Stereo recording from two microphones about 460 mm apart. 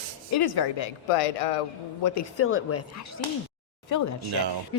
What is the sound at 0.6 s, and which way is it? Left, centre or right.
Speech, left.